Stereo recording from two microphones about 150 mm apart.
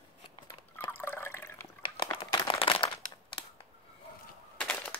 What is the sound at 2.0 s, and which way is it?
Crumpling, 30° left (ahead or behind).